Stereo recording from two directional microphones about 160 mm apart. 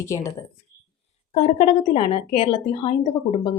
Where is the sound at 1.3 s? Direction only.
40° left (ahead or behind).